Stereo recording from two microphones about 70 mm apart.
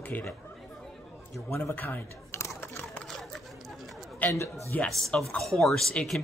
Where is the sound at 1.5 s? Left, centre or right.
Left.